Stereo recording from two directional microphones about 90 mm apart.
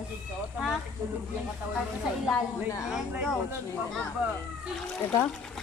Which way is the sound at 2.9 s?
10° right (ahead or behind).